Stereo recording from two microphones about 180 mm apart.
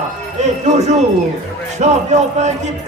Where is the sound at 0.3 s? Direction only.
40° right (ahead or behind).